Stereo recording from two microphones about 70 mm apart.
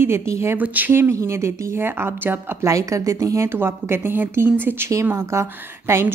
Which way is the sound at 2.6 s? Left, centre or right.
Right.